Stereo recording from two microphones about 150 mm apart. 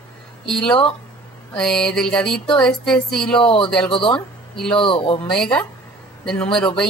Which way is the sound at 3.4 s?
35° left (ahead or behind).